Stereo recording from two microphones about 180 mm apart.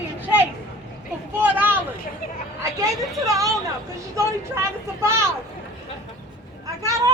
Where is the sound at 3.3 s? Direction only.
20° right (ahead or behind).